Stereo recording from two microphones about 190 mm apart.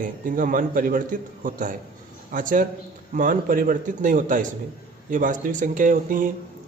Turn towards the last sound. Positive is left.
turn(degrees=-45)  # may be behind; listen again after turning